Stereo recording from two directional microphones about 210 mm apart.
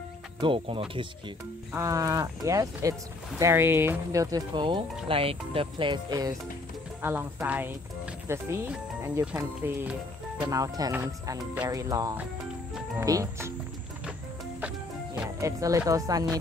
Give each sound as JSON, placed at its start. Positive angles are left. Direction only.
{"t": 0.4, "sound": "speech", "side_deg": -25}
{"t": 1.7, "sound": "speech", "side_deg": -15}
{"t": 15.1, "sound": "speech", "side_deg": -15}